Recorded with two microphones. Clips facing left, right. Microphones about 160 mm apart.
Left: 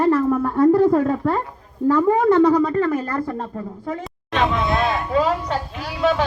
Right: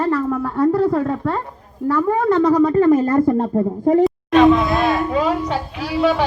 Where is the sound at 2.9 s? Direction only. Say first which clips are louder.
Right 9 dB; 25° right (ahead or behind).